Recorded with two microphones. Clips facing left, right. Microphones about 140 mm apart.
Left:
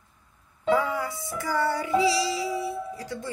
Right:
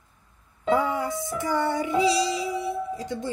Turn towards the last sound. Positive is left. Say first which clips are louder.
# right 4 dB
turn(degrees=-20)  # may be behind; listen again after turning